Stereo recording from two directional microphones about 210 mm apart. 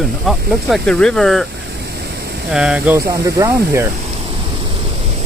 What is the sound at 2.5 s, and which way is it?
Speech, 5° right (ahead or behind).